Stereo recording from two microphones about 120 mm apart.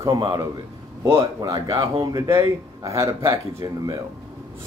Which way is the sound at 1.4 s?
30° right (ahead or behind).